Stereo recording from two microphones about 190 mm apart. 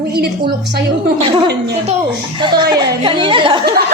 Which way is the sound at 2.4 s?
25° right (ahead or behind).